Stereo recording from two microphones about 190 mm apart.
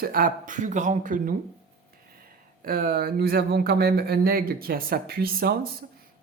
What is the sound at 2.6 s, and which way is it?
Speech, 50° right (ahead or behind).